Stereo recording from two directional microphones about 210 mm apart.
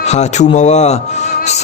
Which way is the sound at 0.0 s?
30° left (ahead or behind).